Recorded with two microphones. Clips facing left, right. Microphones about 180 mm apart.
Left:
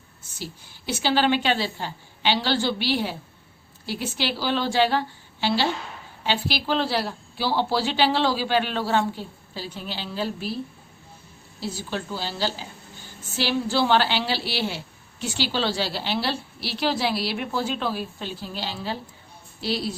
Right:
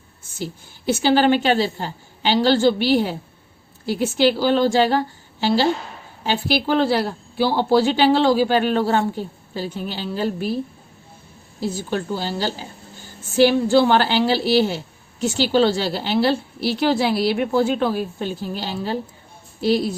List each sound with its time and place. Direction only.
0.9 s a woman's voice: 45° right (ahead or behind)
11.6 s a woman's voice: 50° right (ahead or behind)